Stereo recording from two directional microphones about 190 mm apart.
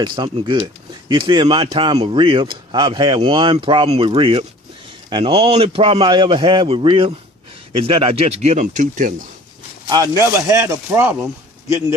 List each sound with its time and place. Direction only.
0.0 s speech: 25° right (ahead or behind); by 9.1 s 45° right (ahead or behind)
9.9 s speech: 15° right (ahead or behind)